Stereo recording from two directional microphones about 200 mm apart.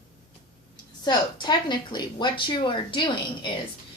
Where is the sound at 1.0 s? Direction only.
20° left (ahead or behind).